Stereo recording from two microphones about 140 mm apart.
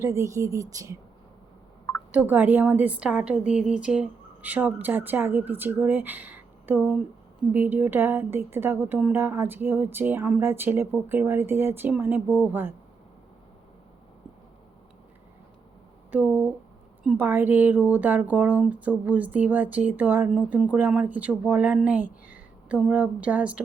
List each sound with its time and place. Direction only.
0.0 s speech: 20° right (ahead or behind)
2.1 s speech: 15° right (ahead or behind)
16.1 s speech: 10° right (ahead or behind)